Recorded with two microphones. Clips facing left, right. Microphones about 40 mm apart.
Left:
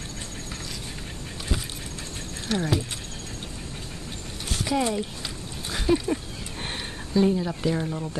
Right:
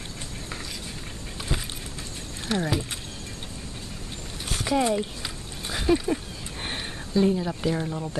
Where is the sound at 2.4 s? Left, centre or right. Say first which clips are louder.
Even; centre.